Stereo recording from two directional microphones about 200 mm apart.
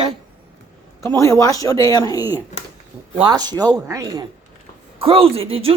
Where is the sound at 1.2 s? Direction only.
15° left (ahead or behind).